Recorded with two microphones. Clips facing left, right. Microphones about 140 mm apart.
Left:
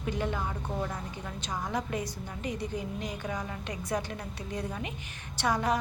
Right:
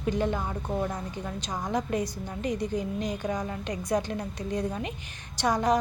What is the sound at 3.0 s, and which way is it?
A woman's voice, 15° right (ahead or behind).